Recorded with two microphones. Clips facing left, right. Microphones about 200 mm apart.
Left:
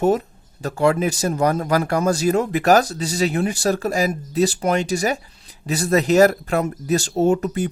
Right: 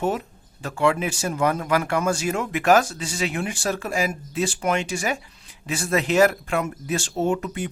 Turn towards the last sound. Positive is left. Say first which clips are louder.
# left 6 dB
turn(degrees=40)  # may be behind; listen again after turning